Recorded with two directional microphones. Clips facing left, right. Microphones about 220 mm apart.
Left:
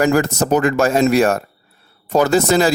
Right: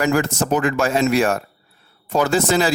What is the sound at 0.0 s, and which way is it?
A man's voice, 40° left (ahead or behind).